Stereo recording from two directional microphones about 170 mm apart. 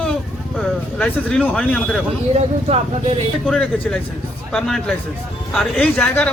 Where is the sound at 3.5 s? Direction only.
5° left (ahead or behind).